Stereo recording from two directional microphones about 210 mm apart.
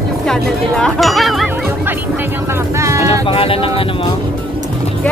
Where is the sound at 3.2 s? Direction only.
25° left (ahead or behind).